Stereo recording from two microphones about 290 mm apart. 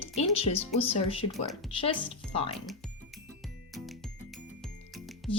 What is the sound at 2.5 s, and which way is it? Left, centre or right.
Speech, centre.